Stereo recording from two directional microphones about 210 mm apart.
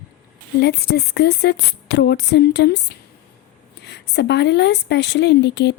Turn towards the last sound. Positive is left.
turn(degrees=55)  # may be behind; listen again after turning